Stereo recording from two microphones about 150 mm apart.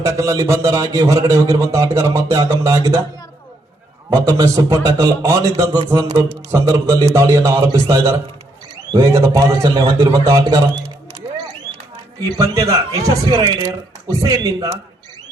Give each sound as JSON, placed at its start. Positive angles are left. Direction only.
{"t": 0.0, "sound": "speech", "side_deg": -20}
{"t": 4.1, "sound": "speech", "side_deg": -20}
{"t": 12.2, "sound": "speech", "side_deg": -25}